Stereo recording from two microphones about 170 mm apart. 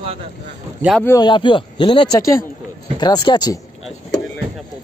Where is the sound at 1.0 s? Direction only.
20° left (ahead or behind).